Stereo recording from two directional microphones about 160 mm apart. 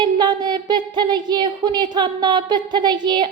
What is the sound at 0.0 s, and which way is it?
A woman's voice, 25° right (ahead or behind).